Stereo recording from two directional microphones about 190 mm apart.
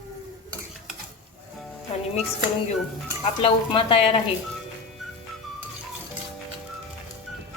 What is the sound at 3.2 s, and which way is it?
Speech, 30° left (ahead or behind).